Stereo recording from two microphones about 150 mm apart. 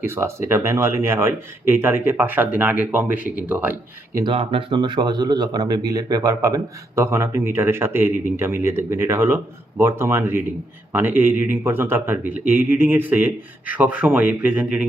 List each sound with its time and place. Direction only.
0.0 s speech: 15° right (ahead or behind)
4.2 s speech: 35° right (ahead or behind); by 14.8 s 10° right (ahead or behind)